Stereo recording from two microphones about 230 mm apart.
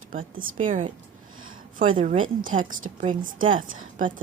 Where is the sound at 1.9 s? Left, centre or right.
Right.